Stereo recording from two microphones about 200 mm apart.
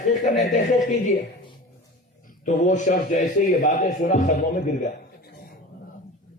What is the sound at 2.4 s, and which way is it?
A man's voice, 40° left (ahead or behind).